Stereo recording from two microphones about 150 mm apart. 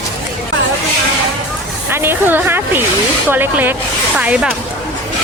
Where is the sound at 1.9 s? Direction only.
15° right (ahead or behind).